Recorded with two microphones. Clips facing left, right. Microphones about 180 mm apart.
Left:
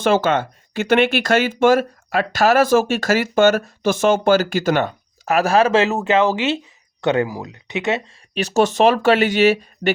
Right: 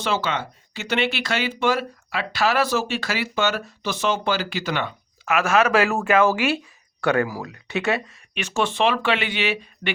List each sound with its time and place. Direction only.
0.0 s speech: 50° left (ahead or behind); by 8.1 s 20° left (ahead or behind)
8.3 s speech: 35° left (ahead or behind)